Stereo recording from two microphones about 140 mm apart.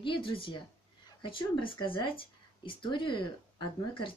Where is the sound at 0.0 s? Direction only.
40° left (ahead or behind).